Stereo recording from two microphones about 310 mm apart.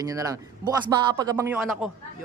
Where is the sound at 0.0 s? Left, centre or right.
Centre.